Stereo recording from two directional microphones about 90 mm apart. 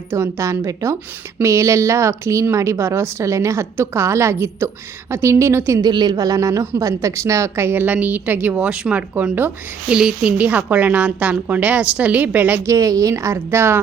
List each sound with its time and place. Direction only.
0.1 s a woman's voice: 30° right (ahead or behind)
5.8 s a woman's voice: 55° right (ahead or behind); by 9.5 s 20° right (ahead or behind)
9.9 s a woman's voice: 10° right (ahead or behind)
12.6 s a woman's voice: 40° right (ahead or behind)